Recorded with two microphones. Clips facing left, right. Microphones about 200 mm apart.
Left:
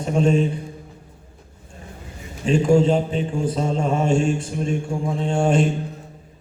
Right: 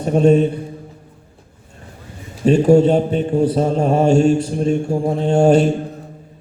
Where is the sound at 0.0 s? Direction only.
40° right (ahead or behind).